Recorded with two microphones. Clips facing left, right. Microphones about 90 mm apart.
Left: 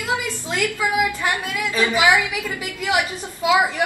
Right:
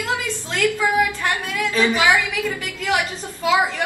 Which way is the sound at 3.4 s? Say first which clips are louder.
Left 1 dB; 15° left (ahead or behind).